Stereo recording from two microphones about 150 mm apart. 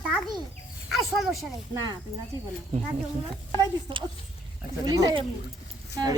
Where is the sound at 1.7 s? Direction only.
30° right (ahead or behind).